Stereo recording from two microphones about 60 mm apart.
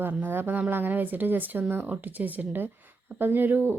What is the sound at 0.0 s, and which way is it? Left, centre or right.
A woman's voice, right.